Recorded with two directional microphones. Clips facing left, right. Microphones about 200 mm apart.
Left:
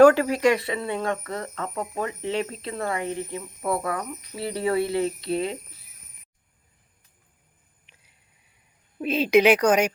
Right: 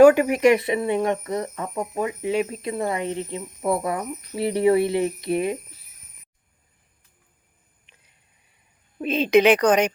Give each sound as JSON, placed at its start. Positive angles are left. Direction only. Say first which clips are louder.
{"t": 0.0, "sound": "speech", "louder": "right 2 dB", "side_deg": -15}
{"t": 9.0, "sound": "speech", "louder": "right 1 dB", "side_deg": 5}